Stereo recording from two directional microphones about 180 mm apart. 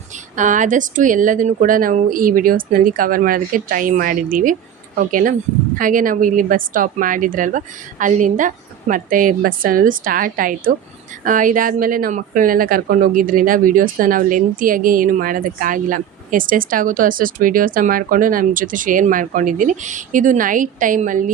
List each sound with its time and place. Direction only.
0.3 s speech: 45° right (ahead or behind)